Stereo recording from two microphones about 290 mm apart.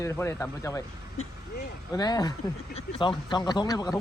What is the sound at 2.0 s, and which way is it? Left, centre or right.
Speech, centre.